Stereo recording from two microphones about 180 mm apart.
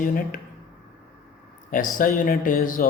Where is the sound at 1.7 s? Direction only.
50° left (ahead or behind).